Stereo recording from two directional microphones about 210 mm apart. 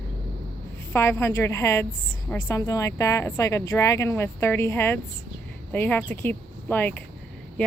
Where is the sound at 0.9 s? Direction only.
10° left (ahead or behind).